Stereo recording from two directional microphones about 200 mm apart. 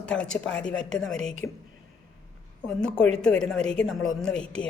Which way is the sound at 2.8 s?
5° left (ahead or behind).